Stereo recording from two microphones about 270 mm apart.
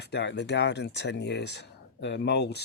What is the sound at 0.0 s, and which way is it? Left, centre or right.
Speech, left.